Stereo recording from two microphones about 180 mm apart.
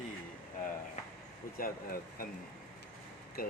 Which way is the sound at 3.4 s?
50° left (ahead or behind).